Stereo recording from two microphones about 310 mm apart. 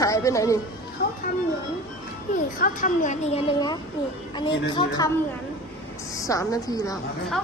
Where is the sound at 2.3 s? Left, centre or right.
Left.